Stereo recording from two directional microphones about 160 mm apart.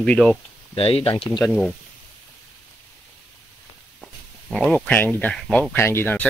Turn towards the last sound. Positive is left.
turn(degrees=10)  # may be behind; listen again after turning